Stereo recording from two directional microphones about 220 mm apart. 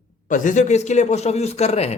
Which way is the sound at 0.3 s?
35° left (ahead or behind).